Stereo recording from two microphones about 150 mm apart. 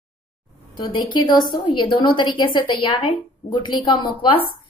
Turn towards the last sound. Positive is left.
turn(degrees=35)  # may be behind; listen again after turning